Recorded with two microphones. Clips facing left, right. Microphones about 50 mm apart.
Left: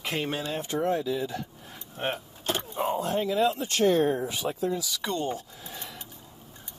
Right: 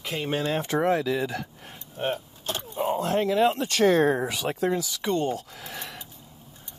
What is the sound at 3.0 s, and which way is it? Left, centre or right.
Speech, right.